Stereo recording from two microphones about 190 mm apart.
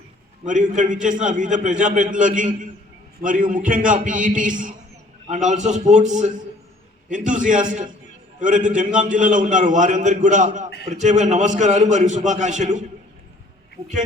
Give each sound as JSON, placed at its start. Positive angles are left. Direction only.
{"t": 0.4, "sound": "a man's voice", "side_deg": -40}